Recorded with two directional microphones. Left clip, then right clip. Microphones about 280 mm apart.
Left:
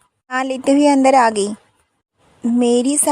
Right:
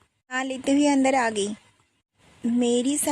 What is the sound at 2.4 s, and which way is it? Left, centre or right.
Speech, centre.